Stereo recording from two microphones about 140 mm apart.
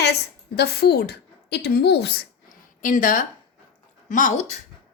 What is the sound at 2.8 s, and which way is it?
Speech, 70° left (ahead or behind).